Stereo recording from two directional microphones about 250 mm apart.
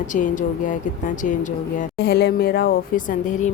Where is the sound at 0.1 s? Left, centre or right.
Left.